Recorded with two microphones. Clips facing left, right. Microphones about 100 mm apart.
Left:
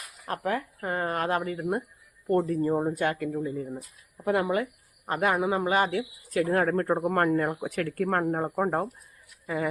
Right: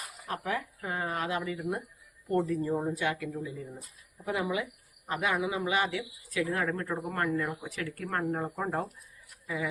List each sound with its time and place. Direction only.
0.4 s speech: 50° left (ahead or behind)